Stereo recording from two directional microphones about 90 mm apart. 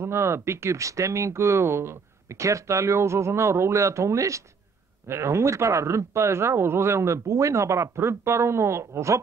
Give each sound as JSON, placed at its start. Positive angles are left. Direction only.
{"t": 0.0, "sound": "speech", "side_deg": -30}